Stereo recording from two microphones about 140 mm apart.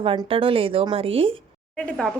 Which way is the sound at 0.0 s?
40° right (ahead or behind).